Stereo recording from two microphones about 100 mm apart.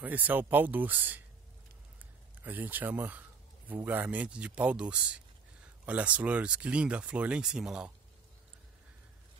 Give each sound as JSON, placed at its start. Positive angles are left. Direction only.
{"t": 0.0, "sound": "speech", "side_deg": -15}
{"t": 2.4, "sound": "speech", "side_deg": -20}